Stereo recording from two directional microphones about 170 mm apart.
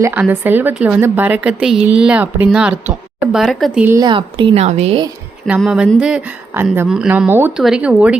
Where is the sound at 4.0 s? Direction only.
30° right (ahead or behind).